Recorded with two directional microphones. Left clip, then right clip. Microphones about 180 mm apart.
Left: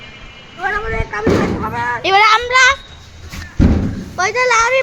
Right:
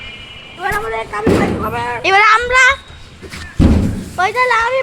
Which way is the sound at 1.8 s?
15° left (ahead or behind).